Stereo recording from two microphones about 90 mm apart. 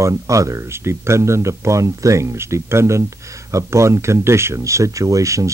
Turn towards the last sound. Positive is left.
turn(degrees=-35)  # may be behind; listen again after turning